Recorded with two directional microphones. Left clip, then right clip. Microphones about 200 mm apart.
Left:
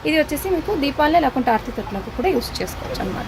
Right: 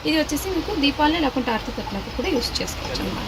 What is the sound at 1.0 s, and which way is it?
Speech, 60° left (ahead or behind).